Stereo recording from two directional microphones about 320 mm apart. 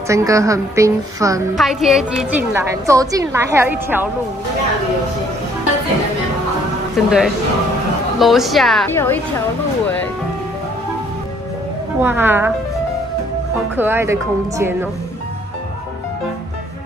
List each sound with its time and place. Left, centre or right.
0.1 s a woman's voice: centre
7.0 s a woman's voice: centre
12.0 s a woman's voice: centre
13.7 s a woman's voice: centre